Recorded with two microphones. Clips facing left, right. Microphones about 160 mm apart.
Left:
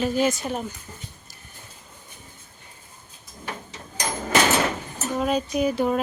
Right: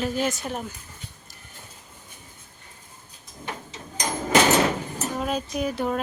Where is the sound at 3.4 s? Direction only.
20° right (ahead or behind).